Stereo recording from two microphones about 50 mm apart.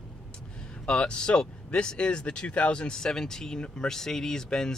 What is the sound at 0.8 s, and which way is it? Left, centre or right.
Speech, centre.